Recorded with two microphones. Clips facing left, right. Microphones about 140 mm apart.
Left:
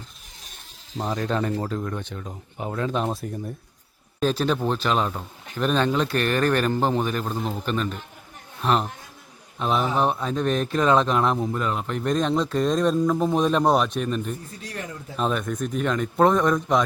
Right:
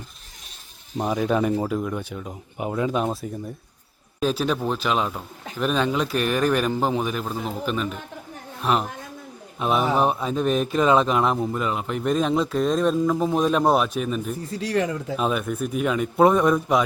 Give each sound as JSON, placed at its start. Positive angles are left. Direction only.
{"t": 0.9, "sound": "speech", "side_deg": -10}
{"t": 14.6, "sound": "a man's voice", "side_deg": -90}
{"t": 15.1, "sound": "speech", "side_deg": -5}